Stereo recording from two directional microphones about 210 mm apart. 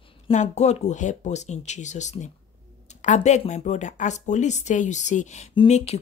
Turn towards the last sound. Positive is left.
turn(degrees=25)  # may be behind; listen again after turning